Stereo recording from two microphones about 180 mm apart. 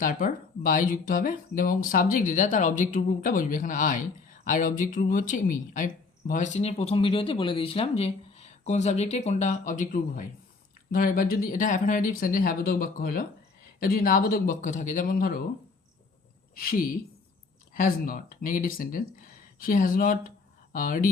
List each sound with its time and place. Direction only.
0.0 s speech: 50° left (ahead or behind)
16.6 s speech: 50° left (ahead or behind)